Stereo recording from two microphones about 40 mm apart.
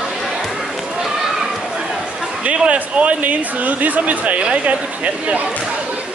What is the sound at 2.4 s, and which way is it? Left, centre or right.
Speech, right.